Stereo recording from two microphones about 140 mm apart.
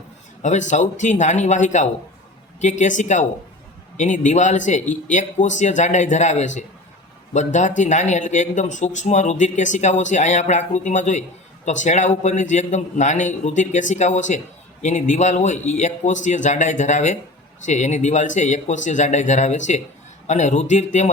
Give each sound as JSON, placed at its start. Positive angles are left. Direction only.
{"t": 0.4, "sound": "a man's voice", "side_deg": 60}